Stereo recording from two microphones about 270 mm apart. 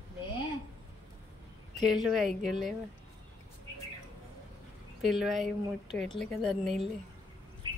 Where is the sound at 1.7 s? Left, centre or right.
Centre.